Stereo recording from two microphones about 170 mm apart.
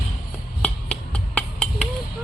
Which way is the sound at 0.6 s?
5° left (ahead or behind).